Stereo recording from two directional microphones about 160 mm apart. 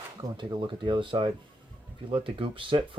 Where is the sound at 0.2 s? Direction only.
30° right (ahead or behind).